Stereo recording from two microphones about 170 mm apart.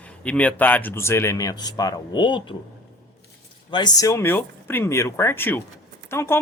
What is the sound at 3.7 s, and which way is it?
Speech, 25° left (ahead or behind).